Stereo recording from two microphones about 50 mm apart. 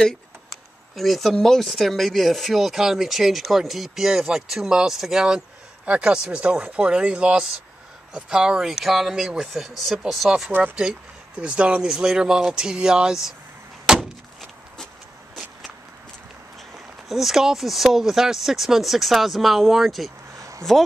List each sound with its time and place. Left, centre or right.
0.9 s speech: centre
8.6 s speech: centre
10.8 s speech: centre
11.9 s speech: centre
13.8 s a sound: centre
16.7 s speech: centre
20.3 s a sound: right